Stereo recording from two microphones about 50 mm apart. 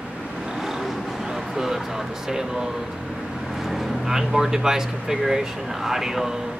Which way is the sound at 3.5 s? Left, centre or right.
Centre.